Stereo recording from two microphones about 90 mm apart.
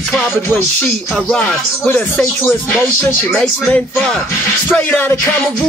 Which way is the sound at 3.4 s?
10° left (ahead or behind).